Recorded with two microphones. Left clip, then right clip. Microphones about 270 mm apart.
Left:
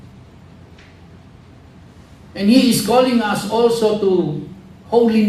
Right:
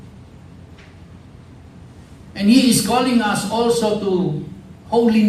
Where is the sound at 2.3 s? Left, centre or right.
Left.